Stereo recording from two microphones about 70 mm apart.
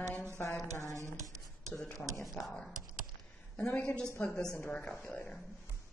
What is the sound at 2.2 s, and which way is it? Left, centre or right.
Speech, centre.